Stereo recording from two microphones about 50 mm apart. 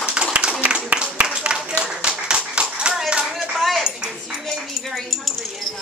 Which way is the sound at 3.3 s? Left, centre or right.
Centre.